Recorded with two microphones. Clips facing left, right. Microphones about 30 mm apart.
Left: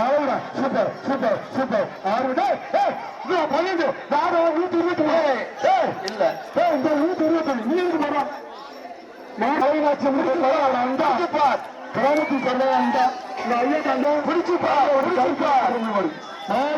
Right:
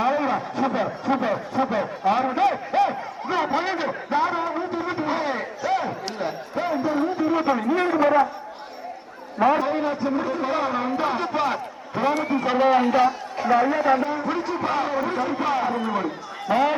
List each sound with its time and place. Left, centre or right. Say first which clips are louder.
0.0 s a sound: left 2 dB; centre
1.0 s speech: left 1 dB; centre
7.3 s a man's voice: even; centre
9.5 s speech: left 5 dB; centre
12.5 s speech: right 3 dB; centre
13.7 s speech: even; centre
16.5 s speech: right 2 dB; centre